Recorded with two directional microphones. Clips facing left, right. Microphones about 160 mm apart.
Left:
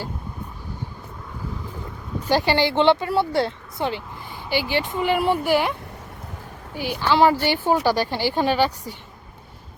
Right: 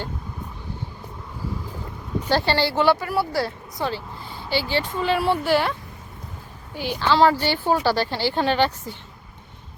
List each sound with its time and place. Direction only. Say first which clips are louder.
2.3 s speech: left 2 dB; 15° left (ahead or behind)
6.7 s speech: even; 10° left (ahead or behind)